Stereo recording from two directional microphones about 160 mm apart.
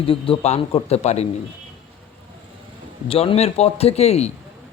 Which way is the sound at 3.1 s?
40° left (ahead or behind).